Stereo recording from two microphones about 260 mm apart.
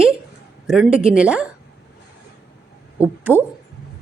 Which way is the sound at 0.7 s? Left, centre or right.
Centre.